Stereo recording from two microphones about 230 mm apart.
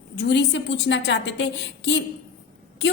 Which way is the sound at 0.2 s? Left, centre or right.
Left.